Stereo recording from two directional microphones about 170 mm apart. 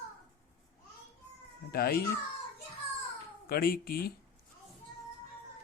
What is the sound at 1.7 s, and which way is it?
Speech, 65° left (ahead or behind).